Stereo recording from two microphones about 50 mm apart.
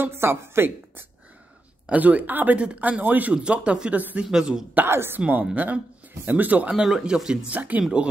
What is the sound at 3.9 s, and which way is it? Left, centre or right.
Speech, right.